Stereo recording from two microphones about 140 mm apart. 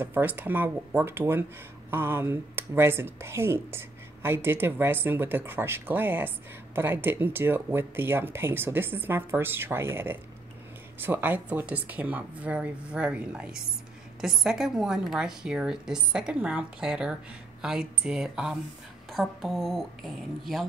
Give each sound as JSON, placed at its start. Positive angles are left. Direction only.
{"t": 0.0, "sound": "a woman's voice", "side_deg": -15}